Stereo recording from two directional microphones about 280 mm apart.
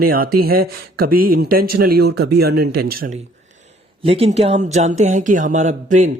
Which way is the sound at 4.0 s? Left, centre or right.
Right.